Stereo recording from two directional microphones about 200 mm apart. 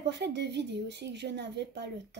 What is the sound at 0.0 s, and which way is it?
Speech, 60° right (ahead or behind).